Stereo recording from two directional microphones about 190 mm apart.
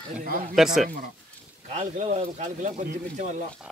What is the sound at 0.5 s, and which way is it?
Speech, centre (ahead or behind).